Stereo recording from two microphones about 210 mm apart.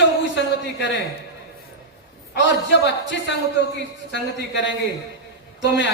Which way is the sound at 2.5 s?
55° left (ahead or behind).